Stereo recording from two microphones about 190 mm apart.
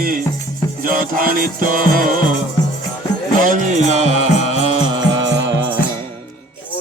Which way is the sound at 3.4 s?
40° right (ahead or behind).